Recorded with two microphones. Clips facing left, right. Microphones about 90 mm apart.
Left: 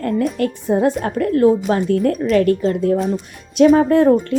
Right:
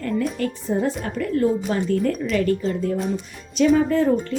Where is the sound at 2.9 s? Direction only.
Centre (ahead or behind).